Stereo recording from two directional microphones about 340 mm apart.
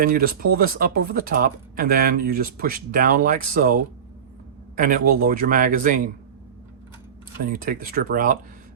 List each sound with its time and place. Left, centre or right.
0.0 s speech: right
4.8 s speech: right
7.5 s speech: right